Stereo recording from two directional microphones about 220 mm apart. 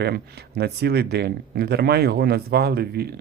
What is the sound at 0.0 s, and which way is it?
Speech, 45° right (ahead or behind).